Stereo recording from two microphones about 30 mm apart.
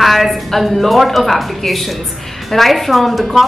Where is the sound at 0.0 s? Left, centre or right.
Centre.